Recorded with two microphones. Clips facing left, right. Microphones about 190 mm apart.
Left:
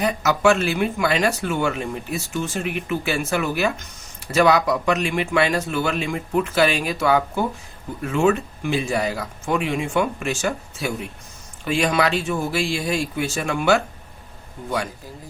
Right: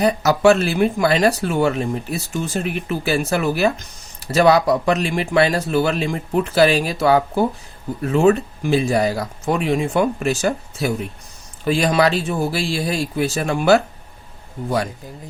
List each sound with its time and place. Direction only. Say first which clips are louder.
0.0 s speech: right 4 dB; 35° right (ahead or behind)